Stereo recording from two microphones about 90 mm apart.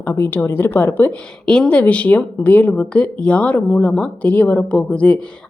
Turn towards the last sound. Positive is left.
turn(degrees=15)  # may be behind; listen again after turning